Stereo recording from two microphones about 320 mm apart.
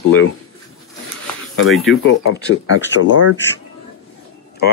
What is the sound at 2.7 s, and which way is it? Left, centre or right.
Speech, left.